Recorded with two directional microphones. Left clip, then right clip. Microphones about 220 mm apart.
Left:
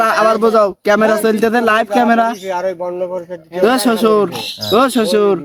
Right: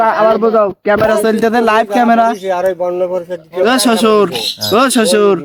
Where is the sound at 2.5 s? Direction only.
40° right (ahead or behind).